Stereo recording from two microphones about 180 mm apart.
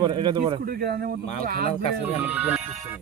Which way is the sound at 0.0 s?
25° right (ahead or behind).